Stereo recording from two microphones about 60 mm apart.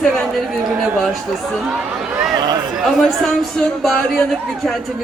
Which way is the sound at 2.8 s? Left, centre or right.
Centre.